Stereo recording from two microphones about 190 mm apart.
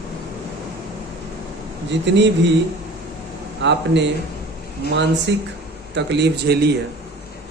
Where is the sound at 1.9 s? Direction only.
70° right (ahead or behind).